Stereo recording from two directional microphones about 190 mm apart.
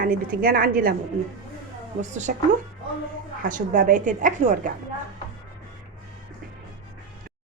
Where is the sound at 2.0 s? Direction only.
40° right (ahead or behind).